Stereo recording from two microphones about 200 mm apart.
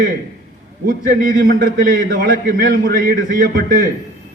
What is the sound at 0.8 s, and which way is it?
A man's voice, 45° right (ahead or behind).